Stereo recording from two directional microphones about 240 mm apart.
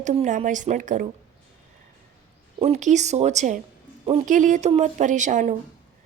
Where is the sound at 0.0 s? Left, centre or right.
Right.